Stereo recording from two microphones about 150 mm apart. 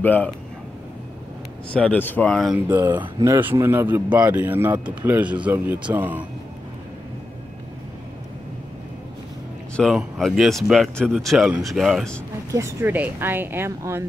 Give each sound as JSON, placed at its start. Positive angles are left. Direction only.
{"t": 0.0, "sound": "speech", "side_deg": 10}
{"t": 1.7, "sound": "speech", "side_deg": 10}
{"t": 2.9, "sound": "speech", "side_deg": -30}
{"t": 3.3, "sound": "speech", "side_deg": -15}
{"t": 9.8, "sound": "speech", "side_deg": 0}
{"t": 12.4, "sound": "speech", "side_deg": -20}